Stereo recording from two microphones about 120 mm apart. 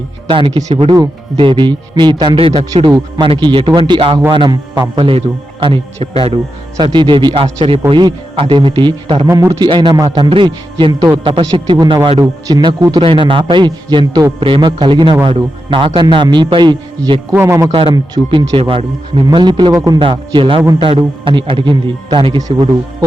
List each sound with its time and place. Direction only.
0.3 s a man's voice: 45° right (ahead or behind)
6.7 s a man's voice: 40° right (ahead or behind)
9.2 s a man's voice: 25° right (ahead or behind)
9.6 s a man's voice: 40° right (ahead or behind)
10.2 s a man's voice: 45° right (ahead or behind)
13.0 s a man's voice: 45° right (ahead or behind)
14.3 s a man's voice: 45° right (ahead or behind)
17.3 s a man's voice: 20° right (ahead or behind)
17.7 s a man's voice: 45° right (ahead or behind)
22.4 s a man's voice: 30° right (ahead or behind)